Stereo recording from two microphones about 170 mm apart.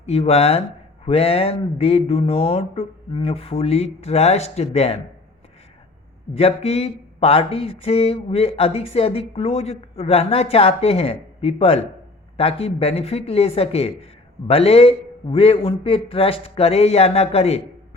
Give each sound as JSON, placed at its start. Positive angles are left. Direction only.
{"t": 0.0, "sound": "speech", "side_deg": 35}
{"t": 6.3, "sound": "speech", "side_deg": 35}